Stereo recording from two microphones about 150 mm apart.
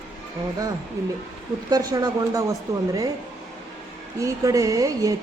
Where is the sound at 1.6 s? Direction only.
25° right (ahead or behind).